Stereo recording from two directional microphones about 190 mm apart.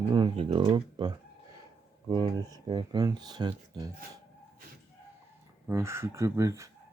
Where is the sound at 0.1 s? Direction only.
25° right (ahead or behind).